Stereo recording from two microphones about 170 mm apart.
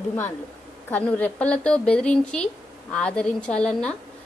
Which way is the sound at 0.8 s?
10° left (ahead or behind).